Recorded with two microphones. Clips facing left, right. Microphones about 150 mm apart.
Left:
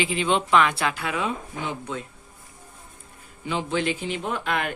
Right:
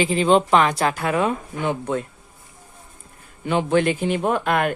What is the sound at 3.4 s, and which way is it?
Speech, 55° right (ahead or behind).